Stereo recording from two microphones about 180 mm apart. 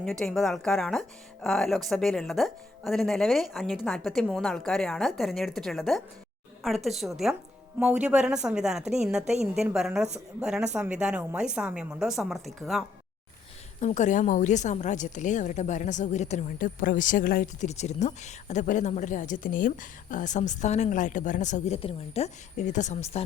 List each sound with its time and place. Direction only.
0.0 s speech: 5° left (ahead or behind)
13.8 s a woman's voice: 40° left (ahead or behind)